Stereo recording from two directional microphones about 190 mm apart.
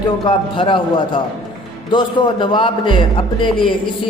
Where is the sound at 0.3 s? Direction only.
25° left (ahead or behind).